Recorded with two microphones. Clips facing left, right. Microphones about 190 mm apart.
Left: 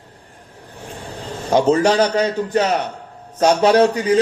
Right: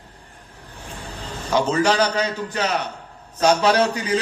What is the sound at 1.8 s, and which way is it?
A man's voice, 50° left (ahead or behind).